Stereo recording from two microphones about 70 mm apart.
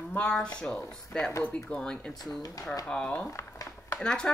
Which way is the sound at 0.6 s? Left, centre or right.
Centre.